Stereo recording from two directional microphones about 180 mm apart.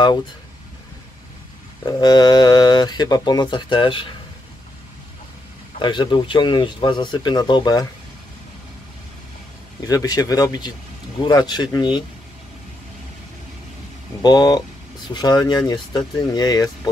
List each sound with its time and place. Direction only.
1.9 s speech: 25° left (ahead or behind)
5.8 s speech: 25° left (ahead or behind)
9.8 s speech: 20° left (ahead or behind)
14.2 s speech: 20° left (ahead or behind)